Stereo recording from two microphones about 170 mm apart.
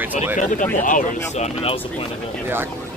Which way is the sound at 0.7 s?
50° left (ahead or behind).